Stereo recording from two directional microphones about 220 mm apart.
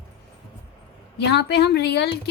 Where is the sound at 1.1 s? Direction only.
50° left (ahead or behind).